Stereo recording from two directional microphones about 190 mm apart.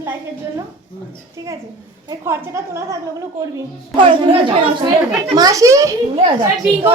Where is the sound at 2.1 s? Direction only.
15° right (ahead or behind).